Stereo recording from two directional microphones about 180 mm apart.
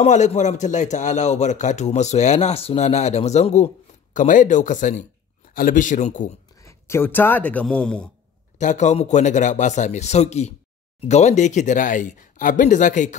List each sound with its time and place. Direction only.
0.0 s a man's voice: 40° left (ahead or behind)
6.6 s speech: 15° left (ahead or behind)
8.5 s a man's voice: 40° left (ahead or behind)